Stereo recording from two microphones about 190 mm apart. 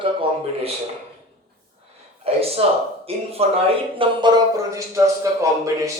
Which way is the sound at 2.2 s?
30° right (ahead or behind).